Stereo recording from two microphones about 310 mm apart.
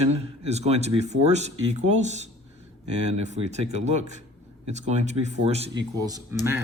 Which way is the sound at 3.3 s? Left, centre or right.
Right.